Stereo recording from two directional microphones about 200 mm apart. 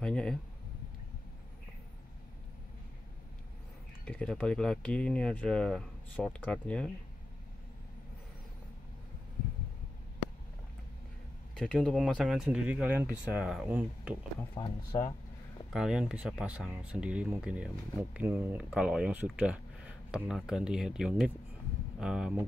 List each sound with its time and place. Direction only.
0.0 s speech: 5° left (ahead or behind)
4.0 s speech: 5° left (ahead or behind)
11.5 s speech: centre (ahead or behind)
14.5 s speech: 20° left (ahead or behind)
15.7 s speech: 5° right (ahead or behind)